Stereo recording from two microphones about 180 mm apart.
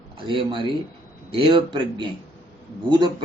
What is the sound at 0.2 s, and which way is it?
A man's voice, 25° right (ahead or behind).